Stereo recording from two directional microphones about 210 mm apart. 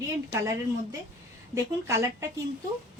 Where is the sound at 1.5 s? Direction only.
15° right (ahead or behind).